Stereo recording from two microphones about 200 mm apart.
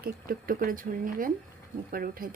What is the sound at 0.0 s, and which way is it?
Speech, 45° right (ahead or behind).